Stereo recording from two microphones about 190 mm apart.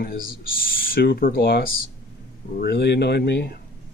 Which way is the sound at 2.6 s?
60° left (ahead or behind).